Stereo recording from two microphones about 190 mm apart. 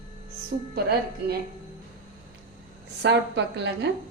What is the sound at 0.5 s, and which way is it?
Speech, 55° right (ahead or behind).